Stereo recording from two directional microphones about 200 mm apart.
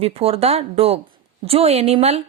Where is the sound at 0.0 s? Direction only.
30° right (ahead or behind).